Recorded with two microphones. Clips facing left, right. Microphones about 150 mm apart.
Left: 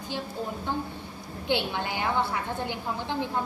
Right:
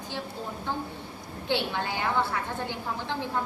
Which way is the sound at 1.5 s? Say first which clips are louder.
Left 1 dB; 15° left (ahead or behind).